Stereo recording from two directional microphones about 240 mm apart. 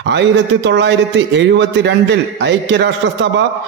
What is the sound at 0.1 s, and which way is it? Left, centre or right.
A man's voice, right.